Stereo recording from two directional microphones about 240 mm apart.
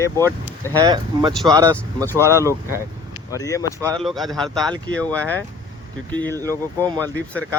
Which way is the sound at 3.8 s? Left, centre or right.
Centre.